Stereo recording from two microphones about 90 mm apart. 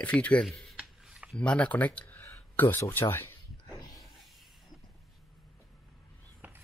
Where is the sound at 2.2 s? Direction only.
25° left (ahead or behind).